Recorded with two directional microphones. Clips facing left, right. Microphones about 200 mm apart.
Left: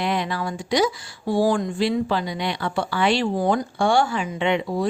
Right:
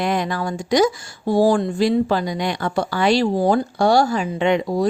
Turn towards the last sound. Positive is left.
turn(degrees=-40)  # may be behind; listen again after turning